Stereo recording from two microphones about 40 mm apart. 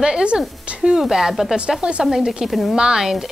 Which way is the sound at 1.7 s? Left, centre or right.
Right.